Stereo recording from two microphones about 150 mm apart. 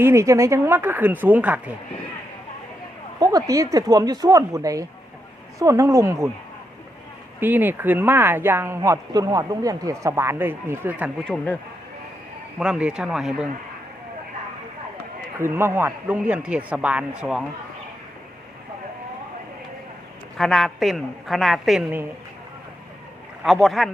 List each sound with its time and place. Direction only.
0.0 s speech: 20° right (ahead or behind)
3.2 s speech: 25° right (ahead or behind)
7.3 s speech: 15° right (ahead or behind)
12.5 s a woman's voice: 5° right (ahead or behind)
15.4 s speech: 15° right (ahead or behind)
20.4 s a woman's voice: centre (ahead or behind)
23.4 s a woman's voice: centre (ahead or behind)